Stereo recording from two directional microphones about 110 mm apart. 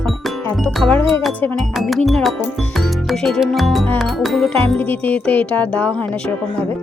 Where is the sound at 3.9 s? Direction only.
Centre (ahead or behind).